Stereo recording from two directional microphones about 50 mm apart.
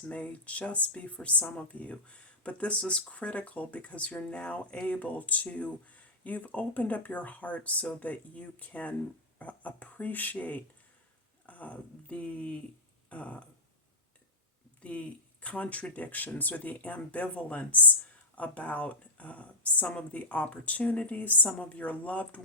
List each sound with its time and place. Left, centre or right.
0.1 s speech: left
14.8 s speech: left